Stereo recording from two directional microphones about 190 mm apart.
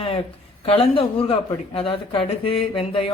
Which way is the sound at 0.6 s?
30° left (ahead or behind).